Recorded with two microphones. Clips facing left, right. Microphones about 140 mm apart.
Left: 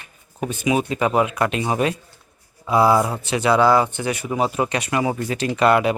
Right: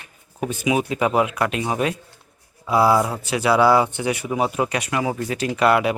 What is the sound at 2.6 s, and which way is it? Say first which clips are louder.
Speech: left 1 dB; 5° right (ahead or behind).